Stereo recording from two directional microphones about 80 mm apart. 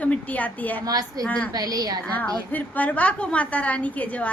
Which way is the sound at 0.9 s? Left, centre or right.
Right.